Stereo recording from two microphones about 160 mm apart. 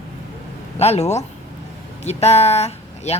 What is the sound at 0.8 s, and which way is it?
Speech, 40° left (ahead or behind).